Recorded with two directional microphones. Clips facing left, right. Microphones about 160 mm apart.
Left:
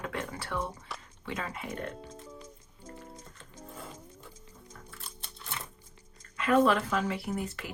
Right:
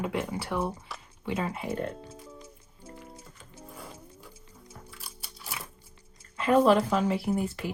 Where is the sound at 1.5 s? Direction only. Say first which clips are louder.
Right 5 dB; 30° right (ahead or behind).